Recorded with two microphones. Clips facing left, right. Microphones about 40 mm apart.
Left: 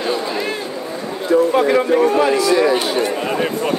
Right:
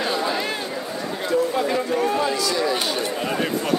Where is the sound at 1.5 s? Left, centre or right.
Left.